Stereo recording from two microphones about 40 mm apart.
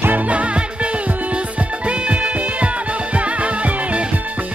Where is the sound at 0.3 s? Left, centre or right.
Right.